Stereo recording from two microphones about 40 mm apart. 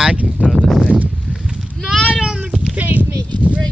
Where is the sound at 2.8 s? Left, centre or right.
Right.